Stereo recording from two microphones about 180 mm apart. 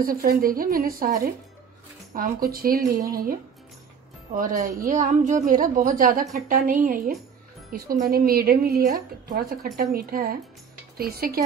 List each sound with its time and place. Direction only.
0.0 s a woman's voice: 55° right (ahead or behind)
4.4 s a woman's voice: 45° right (ahead or behind)